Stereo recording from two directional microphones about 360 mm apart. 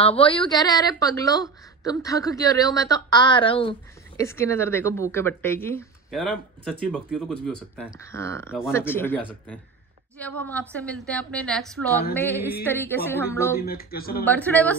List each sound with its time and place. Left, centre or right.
0.0 s a woman's voice: centre
13.6 s speech: left
14.2 s a woman's voice: centre